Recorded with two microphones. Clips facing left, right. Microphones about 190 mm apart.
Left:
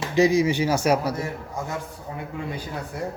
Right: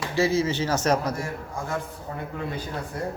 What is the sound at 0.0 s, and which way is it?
Speech, 20° left (ahead or behind).